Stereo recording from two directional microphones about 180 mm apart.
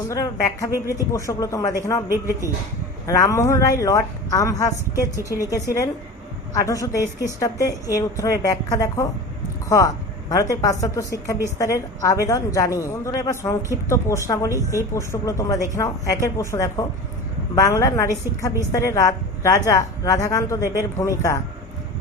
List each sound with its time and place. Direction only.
0.1 s a woman's voice: 20° left (ahead or behind)
2.1 s speech: 15° right (ahead or behind)
3.1 s a woman's voice: 15° left (ahead or behind)